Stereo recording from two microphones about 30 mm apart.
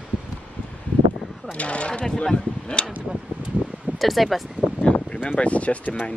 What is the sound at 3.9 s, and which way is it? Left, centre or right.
Speech, centre.